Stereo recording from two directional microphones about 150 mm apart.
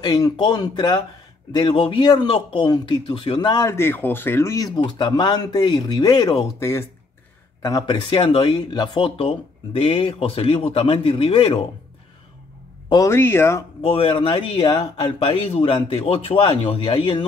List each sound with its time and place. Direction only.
0.0 s speech: 30° left (ahead or behind)
6.6 s speech: 20° left (ahead or behind); by 11.6 s 35° left (ahead or behind)
12.9 s speech: 20° left (ahead or behind)
13.7 s speech: 40° left (ahead or behind)